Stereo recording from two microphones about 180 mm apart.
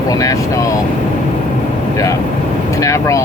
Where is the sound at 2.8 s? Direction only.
15° left (ahead or behind).